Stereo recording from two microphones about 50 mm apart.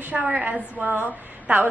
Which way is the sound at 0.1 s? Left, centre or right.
Right.